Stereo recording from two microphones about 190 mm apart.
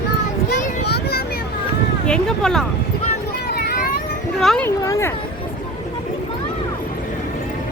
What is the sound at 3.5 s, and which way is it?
Vehicle, 55° left (ahead or behind).